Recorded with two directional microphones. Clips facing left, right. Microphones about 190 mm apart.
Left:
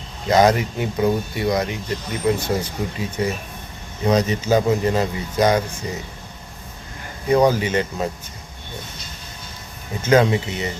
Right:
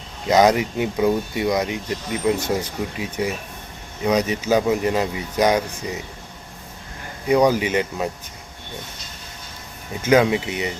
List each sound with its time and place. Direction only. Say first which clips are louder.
0.3 s speech: even; 20° right (ahead or behind)
7.3 s speech: even; 15° right (ahead or behind)
10.0 s speech: even; 10° right (ahead or behind)